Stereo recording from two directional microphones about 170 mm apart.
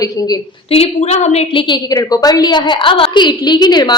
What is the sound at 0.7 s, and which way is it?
Speech, 35° left (ahead or behind).